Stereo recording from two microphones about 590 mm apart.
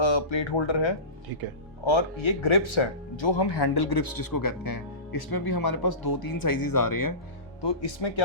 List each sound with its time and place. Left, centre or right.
0.0 s speech: left
7.6 s speech: left